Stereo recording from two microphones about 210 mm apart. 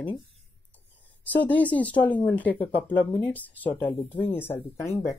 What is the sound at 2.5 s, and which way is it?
Speech, 25° left (ahead or behind).